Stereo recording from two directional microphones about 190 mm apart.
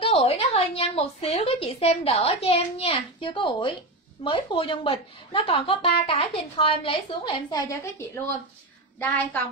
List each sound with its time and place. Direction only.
0.0 s a woman's voice: 30° left (ahead or behind); by 9.4 s 10° left (ahead or behind)